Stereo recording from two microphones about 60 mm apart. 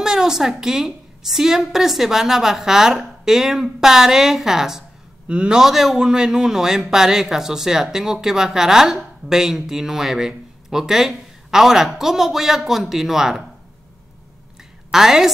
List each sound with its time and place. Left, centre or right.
0.0 s a woman's voice: centre
5.3 s a woman's voice: centre
5.6 s a woman's voice: centre
14.9 s a woman's voice: centre